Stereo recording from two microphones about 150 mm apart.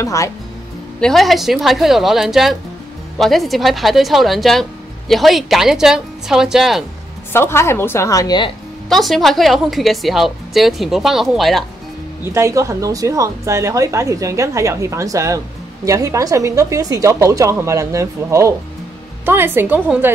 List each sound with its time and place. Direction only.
0.0 s speech: 20° left (ahead or behind)
1.0 s speech: centre (ahead or behind)
7.3 s a woman's voice: 15° left (ahead or behind)
8.8 s speech: centre (ahead or behind)
12.3 s a woman's voice: 20° right (ahead or behind)